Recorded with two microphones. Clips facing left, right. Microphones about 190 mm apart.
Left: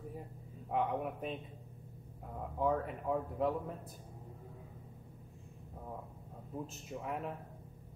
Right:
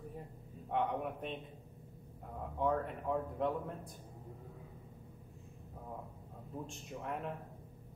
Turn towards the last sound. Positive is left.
turn(degrees=5)  # may be behind; listen again after turning